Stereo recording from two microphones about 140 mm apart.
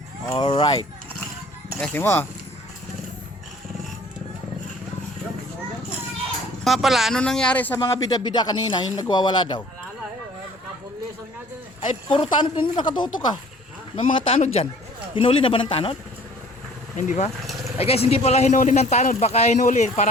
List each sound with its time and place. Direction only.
0.3 s speech: 35° left (ahead or behind)
1.8 s speech: 15° left (ahead or behind)
6.7 s speech: centre (ahead or behind)
7.8 s speech: 25° left (ahead or behind)
12.1 s speech: 35° left (ahead or behind)
17.0 s a man's voice: 60° left (ahead or behind)
17.7 s a man's voice: 45° left (ahead or behind)